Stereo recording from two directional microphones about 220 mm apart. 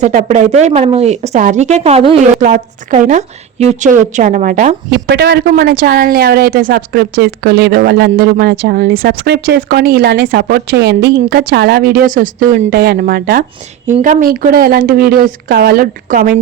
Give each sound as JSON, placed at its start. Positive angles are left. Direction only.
{"t": 0.0, "sound": "speech", "side_deg": -35}
{"t": 4.9, "sound": "a woman's voice", "side_deg": -50}